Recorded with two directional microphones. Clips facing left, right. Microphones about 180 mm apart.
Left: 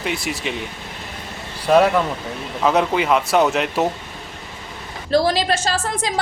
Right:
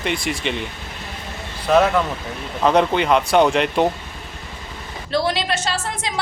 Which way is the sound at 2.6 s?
5° left (ahead or behind).